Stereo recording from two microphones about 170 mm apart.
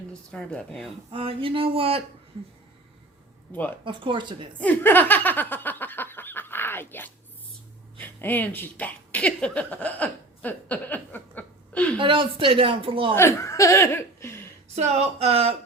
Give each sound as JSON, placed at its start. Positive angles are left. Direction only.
{"t": 0.3, "sound": "speech", "side_deg": 5}
{"t": 1.1, "sound": "speech", "side_deg": -30}
{"t": 3.8, "sound": "speech", "side_deg": -30}
{"t": 4.6, "sound": "snicker", "side_deg": 10}
{"t": 7.9, "sound": "a sound", "side_deg": 10}
{"t": 11.9, "sound": "speech", "side_deg": -30}
{"t": 13.1, "sound": "speech", "side_deg": 15}
{"t": 14.8, "sound": "speech", "side_deg": -40}